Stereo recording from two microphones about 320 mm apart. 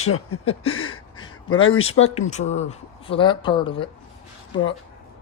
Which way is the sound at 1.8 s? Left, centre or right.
Left.